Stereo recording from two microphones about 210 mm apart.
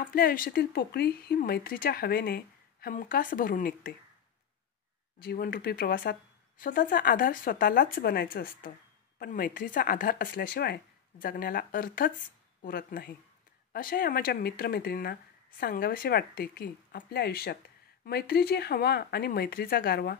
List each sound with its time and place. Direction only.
0.0 s speech: 45° left (ahead or behind)
5.2 s speech: 45° left (ahead or behind)